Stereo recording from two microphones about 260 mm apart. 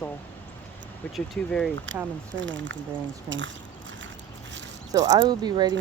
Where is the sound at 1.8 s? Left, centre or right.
Right.